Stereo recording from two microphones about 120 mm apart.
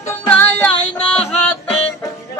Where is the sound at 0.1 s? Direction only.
15° left (ahead or behind).